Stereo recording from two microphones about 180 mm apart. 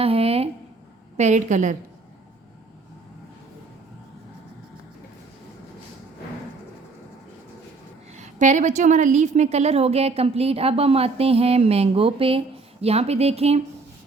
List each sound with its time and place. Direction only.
0.0 s a woman's voice: 30° right (ahead or behind)
8.1 s a woman's voice: 40° right (ahead or behind)